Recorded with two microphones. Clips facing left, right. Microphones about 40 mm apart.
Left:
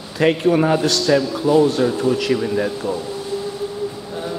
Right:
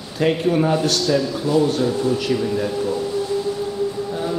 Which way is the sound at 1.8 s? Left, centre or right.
Centre.